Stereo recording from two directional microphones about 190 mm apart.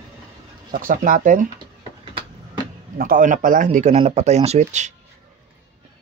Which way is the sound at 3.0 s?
45° right (ahead or behind).